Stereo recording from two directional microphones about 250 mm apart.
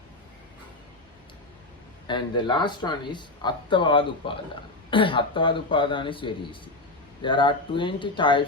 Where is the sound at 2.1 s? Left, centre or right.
Centre.